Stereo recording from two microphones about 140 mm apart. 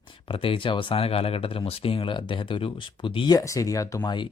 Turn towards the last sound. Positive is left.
turn(degrees=25)  # may be behind; listen again after turning